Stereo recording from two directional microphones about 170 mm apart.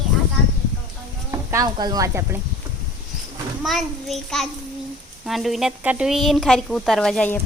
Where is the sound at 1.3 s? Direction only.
20° right (ahead or behind).